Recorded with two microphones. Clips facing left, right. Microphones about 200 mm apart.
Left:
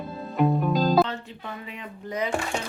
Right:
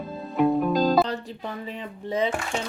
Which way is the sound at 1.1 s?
35° right (ahead or behind).